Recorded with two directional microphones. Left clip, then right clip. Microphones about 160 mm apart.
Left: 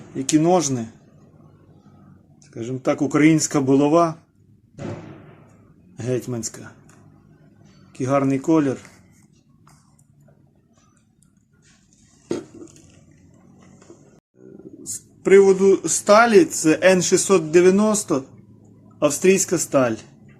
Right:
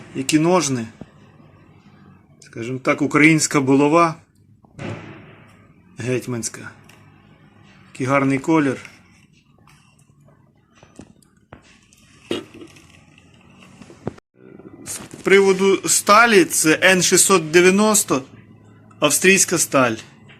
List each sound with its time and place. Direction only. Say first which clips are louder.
0.2 s speech: right 1 dB; 10° left (ahead or behind)
2.5 s speech: right 2 dB; 10° left (ahead or behind)
6.0 s speech: right 2 dB; 10° left (ahead or behind)
7.9 s speech: right 2 dB; 10° left (ahead or behind)
15.4 s speech: left 3 dB; 5° left (ahead or behind)
15.6 s speech: even; 25° left (ahead or behind)